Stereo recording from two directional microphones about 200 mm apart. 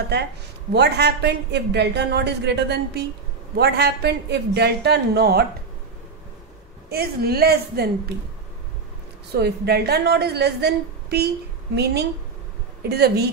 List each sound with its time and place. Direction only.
0.7 s a woman's voice: 55° right (ahead or behind)
6.9 s a woman's voice: 50° right (ahead or behind)
9.4 s a woman's voice: 55° right (ahead or behind)